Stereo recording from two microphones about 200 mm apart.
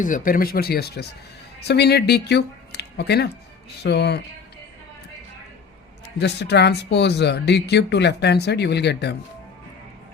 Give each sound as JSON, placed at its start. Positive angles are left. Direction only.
{"t": 0.0, "sound": "speech", "side_deg": 40}
{"t": 6.1, "sound": "speech", "side_deg": 55}